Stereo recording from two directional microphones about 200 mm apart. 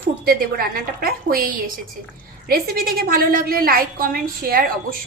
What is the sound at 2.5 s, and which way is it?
A woman's voice, 50° right (ahead or behind).